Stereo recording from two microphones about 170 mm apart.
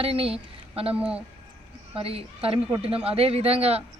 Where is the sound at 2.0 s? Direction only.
35° right (ahead or behind).